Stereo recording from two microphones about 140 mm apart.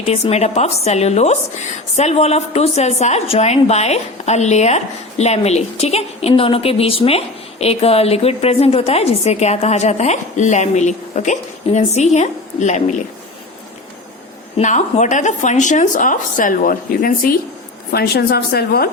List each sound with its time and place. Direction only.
0.1 s a woman's voice: 50° left (ahead or behind)
14.5 s speech: 60° left (ahead or behind); by 17.3 s 85° left
18.3 s a woman's voice: 90° left